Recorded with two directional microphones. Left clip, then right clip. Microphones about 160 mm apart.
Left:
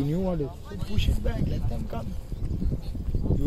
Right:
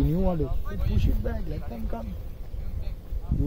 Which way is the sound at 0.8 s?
55° right (ahead or behind).